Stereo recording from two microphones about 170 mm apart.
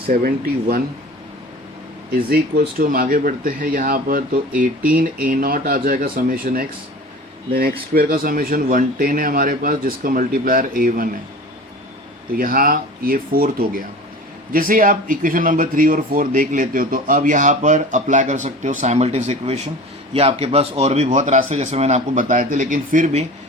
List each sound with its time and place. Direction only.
0.1 s speech: 60° right (ahead or behind)
2.3 s speech: 60° right (ahead or behind)
7.9 s speech: 55° right (ahead or behind)
12.3 s speech: 55° right (ahead or behind)